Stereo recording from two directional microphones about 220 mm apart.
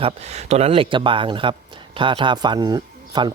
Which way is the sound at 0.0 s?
30° right (ahead or behind).